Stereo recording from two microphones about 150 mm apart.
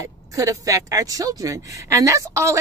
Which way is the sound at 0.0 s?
20° right (ahead or behind).